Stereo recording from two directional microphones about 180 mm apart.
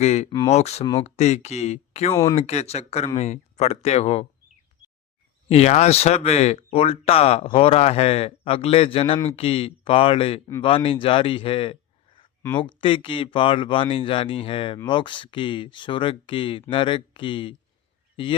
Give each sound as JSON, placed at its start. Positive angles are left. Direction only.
{"t": 0.0, "sound": "speech", "side_deg": 40}
{"t": 5.5, "sound": "a man's voice", "side_deg": 35}